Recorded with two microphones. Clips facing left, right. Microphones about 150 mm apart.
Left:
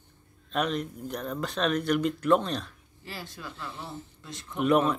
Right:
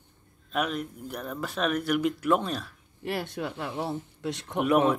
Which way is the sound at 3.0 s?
65° right (ahead or behind).